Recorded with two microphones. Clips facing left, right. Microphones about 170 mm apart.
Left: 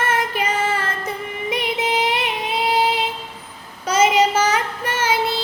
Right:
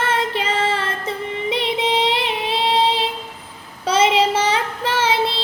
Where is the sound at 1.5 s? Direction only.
25° right (ahead or behind).